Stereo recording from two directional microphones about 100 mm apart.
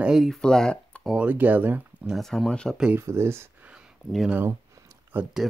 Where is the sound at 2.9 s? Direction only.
25° right (ahead or behind).